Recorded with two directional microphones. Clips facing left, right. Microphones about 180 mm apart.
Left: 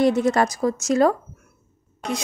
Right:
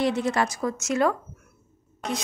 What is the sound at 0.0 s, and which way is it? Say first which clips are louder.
Speech: left 6 dB; 45° left (ahead or behind).